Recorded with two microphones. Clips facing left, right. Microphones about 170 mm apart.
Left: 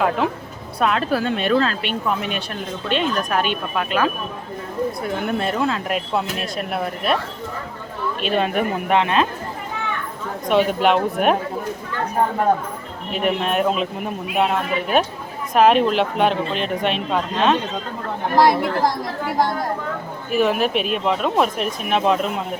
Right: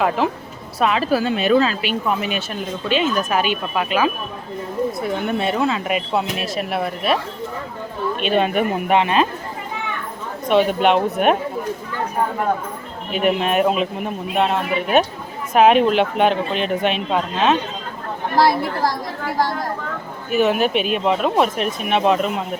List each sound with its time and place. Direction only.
0.8 s speech: centre (ahead or behind)
8.2 s speech: centre (ahead or behind)
10.5 s speech: centre (ahead or behind)
13.1 s speech: 5° right (ahead or behind)
18.3 s speech: 20° left (ahead or behind)
20.3 s speech: centre (ahead or behind)